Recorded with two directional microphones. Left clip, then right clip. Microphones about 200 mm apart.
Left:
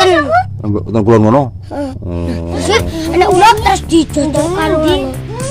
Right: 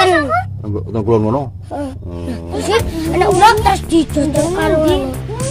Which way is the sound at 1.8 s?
15° left (ahead or behind).